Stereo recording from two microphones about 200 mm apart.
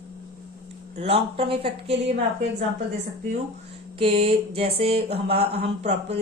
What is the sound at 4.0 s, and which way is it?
Mantra, 25° right (ahead or behind).